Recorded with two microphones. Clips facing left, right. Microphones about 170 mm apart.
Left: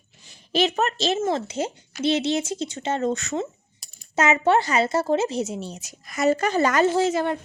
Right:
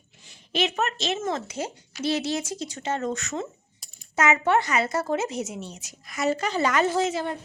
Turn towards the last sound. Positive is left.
turn(degrees=35)  # may be behind; listen again after turning